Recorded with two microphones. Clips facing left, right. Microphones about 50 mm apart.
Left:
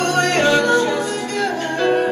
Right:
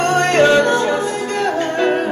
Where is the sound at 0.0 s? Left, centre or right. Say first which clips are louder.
Right 3 dB; right.